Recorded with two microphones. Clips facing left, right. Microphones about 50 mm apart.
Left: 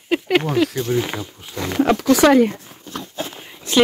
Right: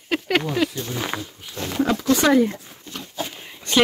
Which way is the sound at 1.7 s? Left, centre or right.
Left.